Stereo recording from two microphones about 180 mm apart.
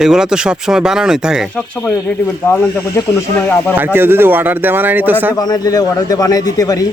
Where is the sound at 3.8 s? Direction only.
10° right (ahead or behind).